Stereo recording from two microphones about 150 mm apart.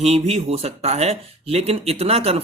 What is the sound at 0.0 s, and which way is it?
Speech, 45° right (ahead or behind).